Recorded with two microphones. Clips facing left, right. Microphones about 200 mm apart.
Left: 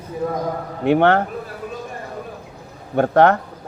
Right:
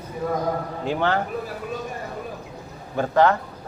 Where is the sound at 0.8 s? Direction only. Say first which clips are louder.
Left 9 dB; 65° left (ahead or behind).